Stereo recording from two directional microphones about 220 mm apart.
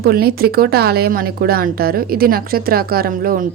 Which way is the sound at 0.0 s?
45° right (ahead or behind).